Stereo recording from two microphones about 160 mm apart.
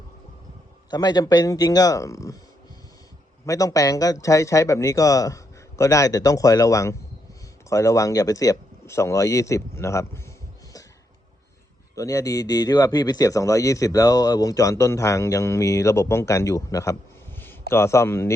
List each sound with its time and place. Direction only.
0.9 s a man's voice: 25° left (ahead or behind)
3.4 s a man's voice: 20° left (ahead or behind)
11.9 s a man's voice: 20° left (ahead or behind)